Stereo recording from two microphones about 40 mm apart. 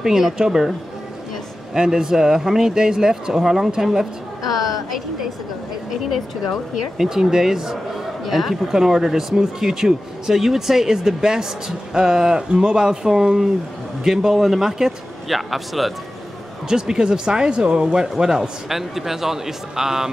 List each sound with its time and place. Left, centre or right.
0.0 s a man's voice: centre
15.2 s a man's voice: centre
16.6 s speech: centre
18.0 s speech: centre